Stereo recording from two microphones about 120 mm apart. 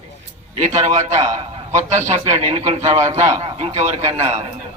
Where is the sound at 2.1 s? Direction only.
25° right (ahead or behind).